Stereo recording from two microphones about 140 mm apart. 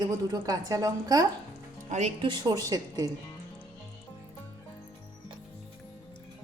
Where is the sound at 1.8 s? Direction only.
55° right (ahead or behind).